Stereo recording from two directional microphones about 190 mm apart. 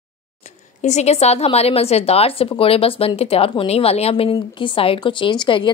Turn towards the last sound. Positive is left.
turn(degrees=25)  # may be behind; listen again after turning